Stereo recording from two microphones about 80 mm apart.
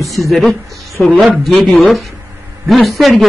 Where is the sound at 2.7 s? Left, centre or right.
Centre.